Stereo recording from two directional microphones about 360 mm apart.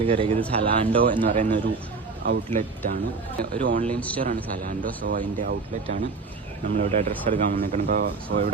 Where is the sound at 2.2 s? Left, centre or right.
Right.